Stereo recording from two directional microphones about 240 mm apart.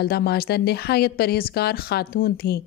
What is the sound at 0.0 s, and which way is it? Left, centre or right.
A woman's voice, left.